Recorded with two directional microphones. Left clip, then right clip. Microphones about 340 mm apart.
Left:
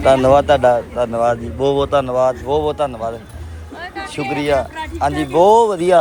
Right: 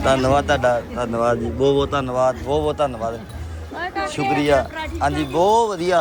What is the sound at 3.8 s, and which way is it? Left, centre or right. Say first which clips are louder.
Music: right 3 dB; right.